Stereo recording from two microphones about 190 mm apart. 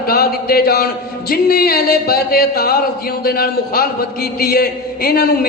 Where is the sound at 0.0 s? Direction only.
55° left (ahead or behind).